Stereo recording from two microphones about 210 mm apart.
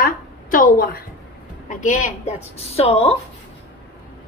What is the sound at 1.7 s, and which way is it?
A woman's voice, 35° left (ahead or behind).